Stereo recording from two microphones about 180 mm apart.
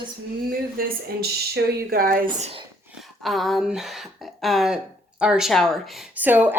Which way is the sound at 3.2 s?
Centre (ahead or behind).